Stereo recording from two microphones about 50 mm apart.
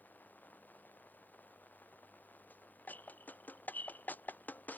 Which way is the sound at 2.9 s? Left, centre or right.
Left.